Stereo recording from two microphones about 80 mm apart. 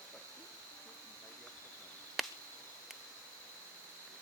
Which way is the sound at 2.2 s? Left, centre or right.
Centre.